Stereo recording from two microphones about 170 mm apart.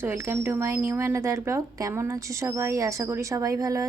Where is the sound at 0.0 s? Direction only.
15° right (ahead or behind).